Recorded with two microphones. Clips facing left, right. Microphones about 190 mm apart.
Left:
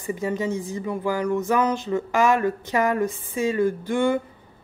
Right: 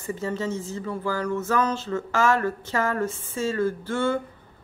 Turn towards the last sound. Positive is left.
turn(degrees=15)  # may be behind; listen again after turning